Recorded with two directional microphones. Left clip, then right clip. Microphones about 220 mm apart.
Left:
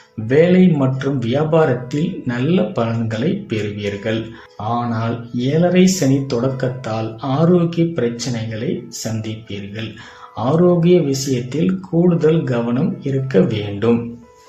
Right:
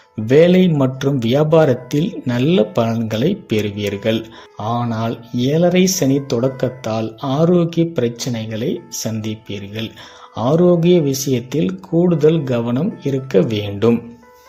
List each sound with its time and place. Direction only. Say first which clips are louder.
0.3 s speech: right 2 dB; 35° right (ahead or behind)